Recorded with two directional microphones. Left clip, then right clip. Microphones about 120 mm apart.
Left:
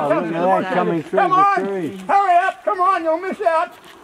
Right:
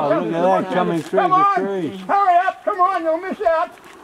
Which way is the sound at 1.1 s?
15° left (ahead or behind).